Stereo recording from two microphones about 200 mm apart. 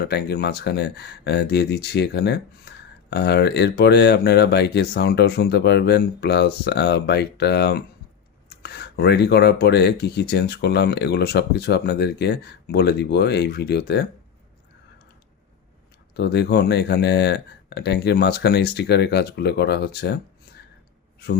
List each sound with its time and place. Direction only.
0.0 s speech: 55° left (ahead or behind)
16.1 s speech: 55° left (ahead or behind)